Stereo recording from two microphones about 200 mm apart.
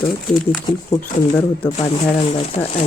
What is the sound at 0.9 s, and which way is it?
Speech, 15° left (ahead or behind).